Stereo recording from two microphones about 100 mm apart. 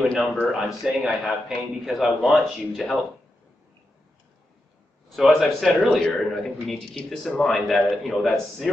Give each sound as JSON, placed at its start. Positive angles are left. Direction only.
{"t": 0.0, "sound": "speech", "side_deg": 5}
{"t": 0.5, "sound": "speech", "side_deg": -5}
{"t": 5.1, "sound": "speech", "side_deg": 0}